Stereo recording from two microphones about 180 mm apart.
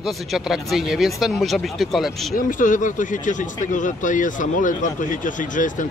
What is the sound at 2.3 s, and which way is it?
Speech, 45° left (ahead or behind).